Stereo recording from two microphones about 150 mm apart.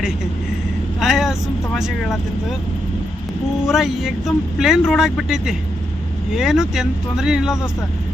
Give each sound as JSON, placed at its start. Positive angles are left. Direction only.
{"t": 0.9, "sound": "vehicle", "side_deg": 0}
{"t": 3.7, "sound": "speech", "side_deg": 0}